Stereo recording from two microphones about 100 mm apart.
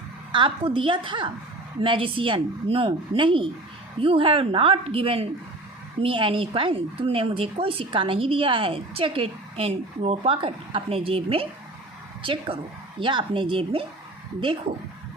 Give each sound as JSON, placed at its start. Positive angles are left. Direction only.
{"t": 0.3, "sound": "a woman's voice", "side_deg": -55}
{"t": 12.2, "sound": "a woman's voice", "side_deg": -60}